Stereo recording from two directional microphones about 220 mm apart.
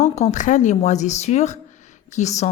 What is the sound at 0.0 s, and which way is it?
Speech, 30° left (ahead or behind).